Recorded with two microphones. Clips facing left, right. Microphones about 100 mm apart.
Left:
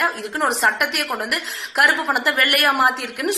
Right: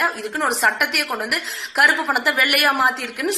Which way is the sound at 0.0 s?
Centre (ahead or behind).